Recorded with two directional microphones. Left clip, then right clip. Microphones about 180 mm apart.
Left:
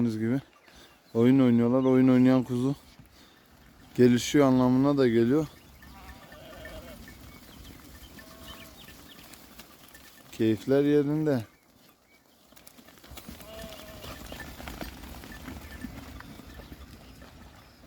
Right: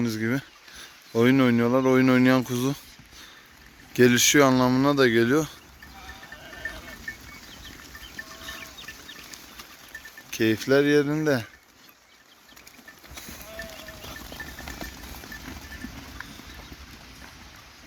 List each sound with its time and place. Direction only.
0.0 s speech: 10° left (ahead or behind)
3.9 s speech: 10° left (ahead or behind)
7.1 s a sound: 80° left
10.3 s speech: 10° left (ahead or behind)